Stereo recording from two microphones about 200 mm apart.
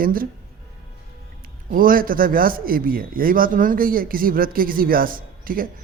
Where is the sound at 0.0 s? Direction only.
45° right (ahead or behind).